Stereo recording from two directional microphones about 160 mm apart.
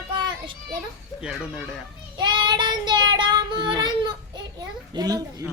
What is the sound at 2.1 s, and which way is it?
Child singing, 30° right (ahead or behind).